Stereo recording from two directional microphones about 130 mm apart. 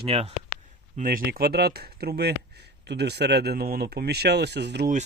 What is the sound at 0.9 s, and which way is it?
Speech, 90° right.